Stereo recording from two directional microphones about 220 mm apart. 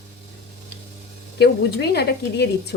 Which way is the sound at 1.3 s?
50° left (ahead or behind).